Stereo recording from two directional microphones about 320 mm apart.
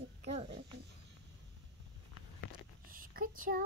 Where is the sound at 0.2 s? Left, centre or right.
Right.